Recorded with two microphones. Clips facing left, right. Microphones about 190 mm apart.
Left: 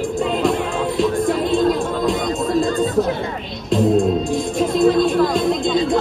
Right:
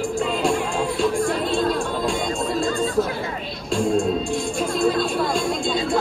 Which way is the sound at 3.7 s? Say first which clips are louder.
Left 5 dB; 5° left (ahead or behind).